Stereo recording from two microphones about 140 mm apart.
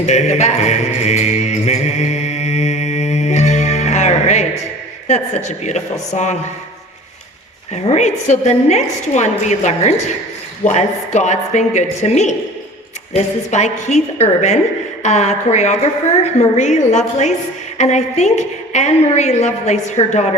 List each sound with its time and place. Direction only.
0.0 s mantra: 55° left (ahead or behind)
5.0 s a woman's voice: 50° left (ahead or behind)
7.7 s a woman's voice: 55° left (ahead or behind)